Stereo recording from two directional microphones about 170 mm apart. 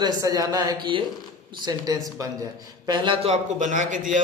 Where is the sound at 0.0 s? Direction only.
20° right (ahead or behind).